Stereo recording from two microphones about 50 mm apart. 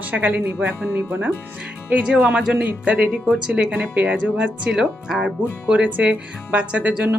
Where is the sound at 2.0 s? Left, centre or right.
Right.